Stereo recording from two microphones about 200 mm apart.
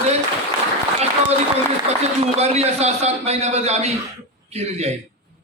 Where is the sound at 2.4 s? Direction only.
30° right (ahead or behind).